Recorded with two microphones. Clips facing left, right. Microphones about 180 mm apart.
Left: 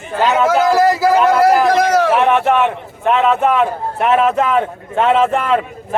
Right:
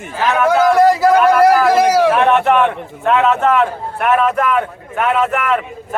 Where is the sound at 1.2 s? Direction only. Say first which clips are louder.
Right 1 dB; 20° left (ahead or behind).